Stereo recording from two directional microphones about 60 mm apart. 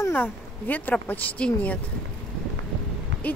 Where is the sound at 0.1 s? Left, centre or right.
Left.